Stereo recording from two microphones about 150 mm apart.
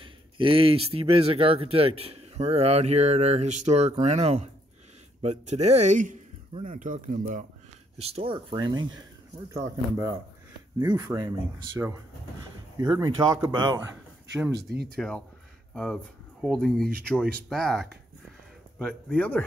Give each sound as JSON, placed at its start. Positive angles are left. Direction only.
{"t": 0.0, "sound": "speech", "side_deg": -35}
{"t": 8.0, "sound": "speech", "side_deg": -40}
{"t": 12.7, "sound": "speech", "side_deg": -25}
{"t": 14.6, "sound": "speech", "side_deg": -90}
{"t": 15.0, "sound": "speech", "side_deg": 5}